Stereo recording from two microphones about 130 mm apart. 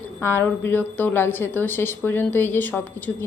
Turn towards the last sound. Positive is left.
turn(degrees=15)  # may be behind; listen again after turning